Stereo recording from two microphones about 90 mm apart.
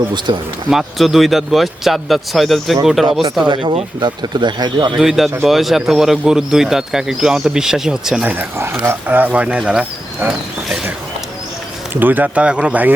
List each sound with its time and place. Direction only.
0.3 s speech: 55° right (ahead or behind)
0.7 s speech: centre (ahead or behind)
3.4 s speech: 60° right (ahead or behind)
4.9 s speech: 5° right (ahead or behind)
8.2 s speech: 20° right (ahead or behind)
11.9 s speech: 20° right (ahead or behind)